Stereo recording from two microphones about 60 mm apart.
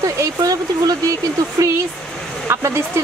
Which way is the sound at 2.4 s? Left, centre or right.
Right.